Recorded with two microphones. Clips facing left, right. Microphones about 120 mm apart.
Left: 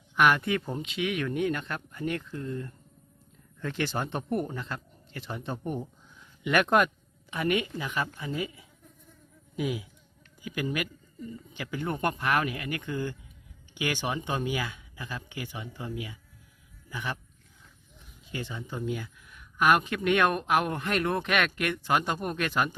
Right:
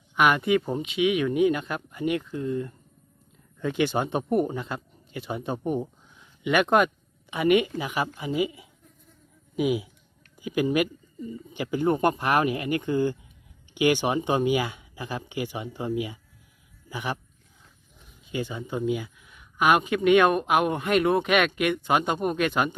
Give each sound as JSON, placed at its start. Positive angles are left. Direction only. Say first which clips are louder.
{"t": 0.2, "sound": "speech", "louder": "right 3 dB", "side_deg": -5}
{"t": 18.3, "sound": "speech", "louder": "right 6 dB", "side_deg": -10}